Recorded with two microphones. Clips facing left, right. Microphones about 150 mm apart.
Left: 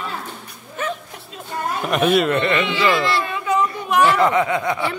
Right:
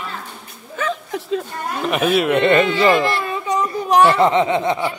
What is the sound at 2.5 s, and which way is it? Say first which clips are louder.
Speech: right 4 dB; 40° right (ahead or behind).